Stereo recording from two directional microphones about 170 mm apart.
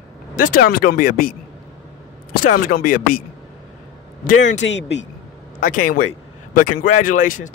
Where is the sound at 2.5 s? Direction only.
55° left (ahead or behind).